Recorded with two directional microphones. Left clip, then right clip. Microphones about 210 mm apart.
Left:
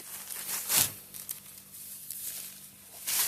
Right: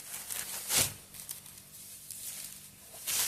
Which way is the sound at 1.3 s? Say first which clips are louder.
Left 1 dB; 15° left (ahead or behind).